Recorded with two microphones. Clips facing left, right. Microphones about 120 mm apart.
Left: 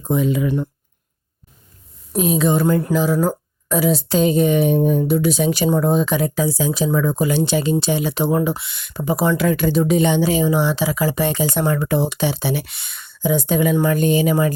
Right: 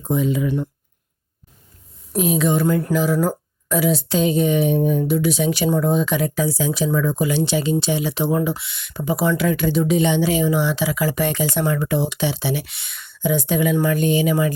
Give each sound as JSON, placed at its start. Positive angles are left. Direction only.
{"t": 0.1, "sound": "speech", "side_deg": 65}
{"t": 2.1, "sound": "speech", "side_deg": 35}
{"t": 2.9, "sound": "speech", "side_deg": 25}
{"t": 3.7, "sound": "speech", "side_deg": 40}